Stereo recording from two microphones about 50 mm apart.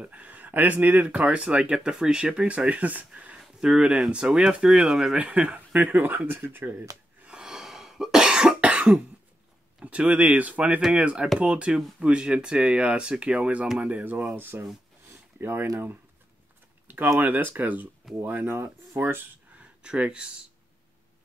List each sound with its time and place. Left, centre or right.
0.0 s speech: right
3.3 s speech: centre; by 6.9 s right
7.2 s cough: centre
8.5 s cough: right
9.8 s speech: right
14.3 s speech: right
16.8 s a sound: right
17.2 s speech: right
19.8 s speech: centre